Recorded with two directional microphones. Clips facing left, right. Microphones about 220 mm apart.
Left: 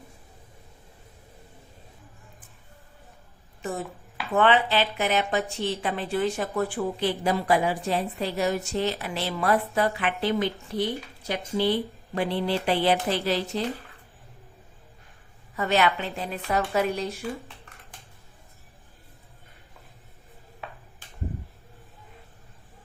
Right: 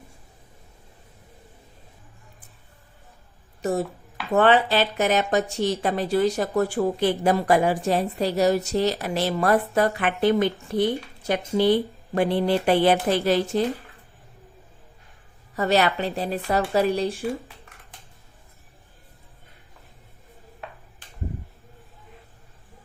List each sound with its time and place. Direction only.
3.6 s a woman's voice: 40° right (ahead or behind)
15.5 s a woman's voice: 35° right (ahead or behind)